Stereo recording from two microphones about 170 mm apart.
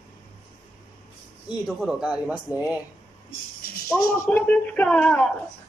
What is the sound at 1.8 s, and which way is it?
A woman's voice, 5° right (ahead or behind).